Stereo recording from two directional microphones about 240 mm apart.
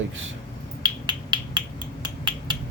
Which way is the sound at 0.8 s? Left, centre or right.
Centre.